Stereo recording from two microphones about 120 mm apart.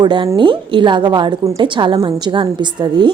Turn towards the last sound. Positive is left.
turn(degrees=-40)  # may be behind; listen again after turning